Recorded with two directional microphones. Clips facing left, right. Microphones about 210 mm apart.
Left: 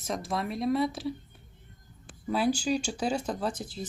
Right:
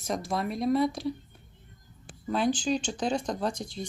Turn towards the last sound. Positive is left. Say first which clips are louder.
# right 1 dB
turn(degrees=5)  # may be behind; listen again after turning